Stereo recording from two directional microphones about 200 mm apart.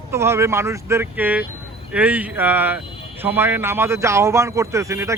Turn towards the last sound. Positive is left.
turn(degrees=-15)  # may be behind; listen again after turning